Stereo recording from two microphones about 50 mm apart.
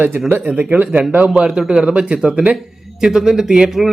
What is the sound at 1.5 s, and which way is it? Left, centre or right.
Speech, centre.